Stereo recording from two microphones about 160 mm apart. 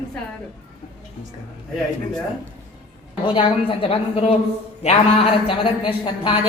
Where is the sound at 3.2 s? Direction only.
35° left (ahead or behind).